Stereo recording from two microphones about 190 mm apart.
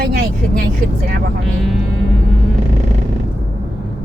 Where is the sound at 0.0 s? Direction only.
50° right (ahead or behind).